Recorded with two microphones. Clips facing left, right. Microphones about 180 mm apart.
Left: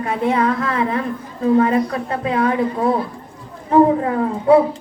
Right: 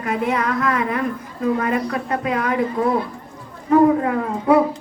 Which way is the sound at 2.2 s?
30° left (ahead or behind).